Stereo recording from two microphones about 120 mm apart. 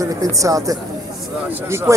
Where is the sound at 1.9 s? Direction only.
25° right (ahead or behind).